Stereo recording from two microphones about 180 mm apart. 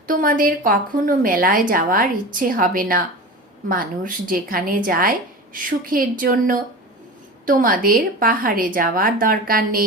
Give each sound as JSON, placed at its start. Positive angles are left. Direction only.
{"t": 0.1, "sound": "a woman's voice", "side_deg": -50}